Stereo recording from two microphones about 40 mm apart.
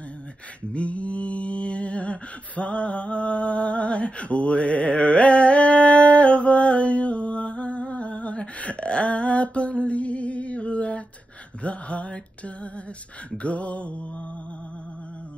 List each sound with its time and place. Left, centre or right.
0.7 s mantra: left
11.6 s a sound: left
13.4 s mantra: left